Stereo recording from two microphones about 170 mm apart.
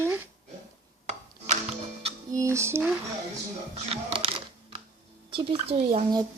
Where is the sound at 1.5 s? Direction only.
40° right (ahead or behind).